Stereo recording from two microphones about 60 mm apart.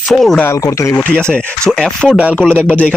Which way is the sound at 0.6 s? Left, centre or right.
Left.